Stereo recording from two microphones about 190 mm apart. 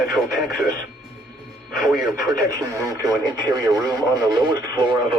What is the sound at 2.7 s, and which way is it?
Speech, 15° right (ahead or behind).